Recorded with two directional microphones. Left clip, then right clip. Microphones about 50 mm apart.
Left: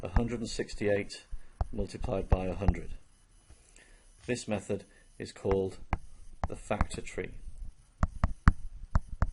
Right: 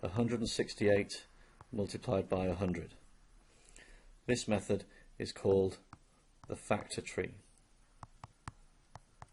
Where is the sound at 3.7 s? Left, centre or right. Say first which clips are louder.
Even; right.